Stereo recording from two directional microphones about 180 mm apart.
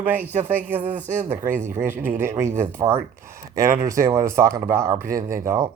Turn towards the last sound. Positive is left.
turn(degrees=-15)  # may be behind; listen again after turning